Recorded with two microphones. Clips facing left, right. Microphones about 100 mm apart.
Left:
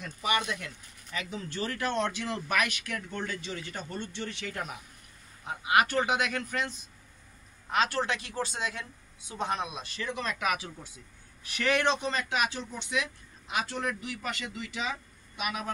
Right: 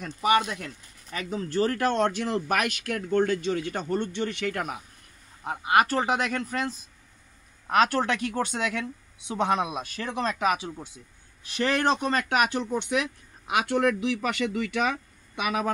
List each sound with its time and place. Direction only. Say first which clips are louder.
0.0 s speech: right 7 dB; 40° right (ahead or behind); by 4.7 s 60° right (ahead or behind)
5.4 s speech: right 3 dB; 45° right (ahead or behind)
7.6 s speech: right 6 dB; 55° right (ahead or behind)
10.1 s speech: right 6 dB; 30° right (ahead or behind); by 15.7 s 75° right (ahead or behind)